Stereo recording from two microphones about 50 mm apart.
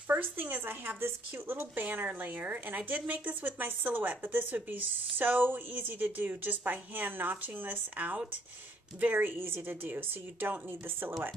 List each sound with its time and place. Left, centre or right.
0.1 s a woman's voice: right